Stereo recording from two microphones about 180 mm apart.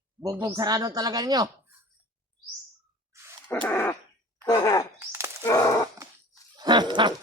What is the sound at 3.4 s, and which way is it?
Speech, 10° left (ahead or behind).